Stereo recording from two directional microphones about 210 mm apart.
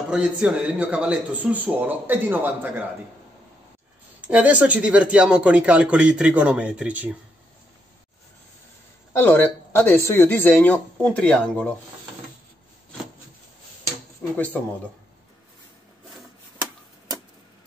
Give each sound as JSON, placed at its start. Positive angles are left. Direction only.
{"t": 0.1, "sound": "a man's voice", "side_deg": -5}
{"t": 4.3, "sound": "speech", "side_deg": -5}
{"t": 9.1, "sound": "speech", "side_deg": 10}
{"t": 14.3, "sound": "speech", "side_deg": 10}